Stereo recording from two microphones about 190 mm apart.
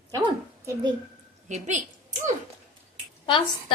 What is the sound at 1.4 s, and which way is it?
Speech, 40° right (ahead or behind).